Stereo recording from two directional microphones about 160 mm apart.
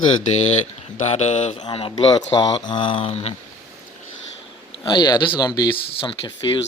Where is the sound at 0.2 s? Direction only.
50° left (ahead or behind).